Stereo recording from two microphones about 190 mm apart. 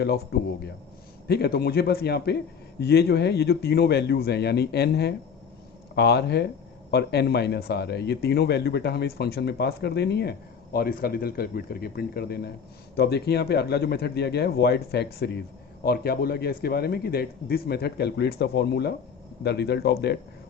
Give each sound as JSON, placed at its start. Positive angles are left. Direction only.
{"t": 1.3, "sound": "speech", "side_deg": 55}